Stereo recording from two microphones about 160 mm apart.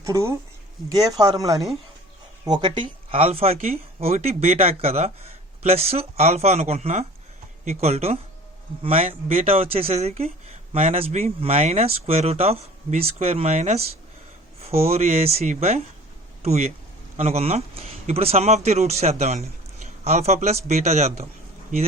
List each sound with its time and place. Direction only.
0.0 s speech: 20° right (ahead or behind); by 21.2 s 40° right (ahead or behind)